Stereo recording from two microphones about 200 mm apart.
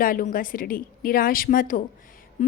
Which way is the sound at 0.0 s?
45° left (ahead or behind).